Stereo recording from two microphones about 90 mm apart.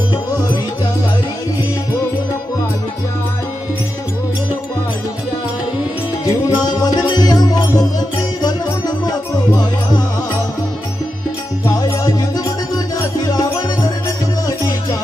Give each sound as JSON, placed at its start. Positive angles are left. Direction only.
{"t": 6.2, "sound": "music", "side_deg": 50}
{"t": 11.6, "sound": "music", "side_deg": 40}